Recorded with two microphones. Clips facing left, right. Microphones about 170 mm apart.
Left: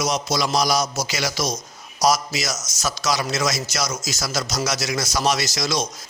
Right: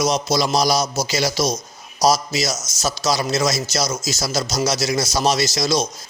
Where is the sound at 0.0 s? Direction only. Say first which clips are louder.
Right 4 dB; 25° right (ahead or behind).